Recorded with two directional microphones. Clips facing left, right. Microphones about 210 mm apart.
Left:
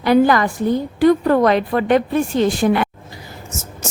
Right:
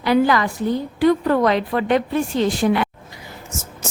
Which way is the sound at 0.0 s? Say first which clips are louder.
Left 3 dB; 50° left (ahead or behind).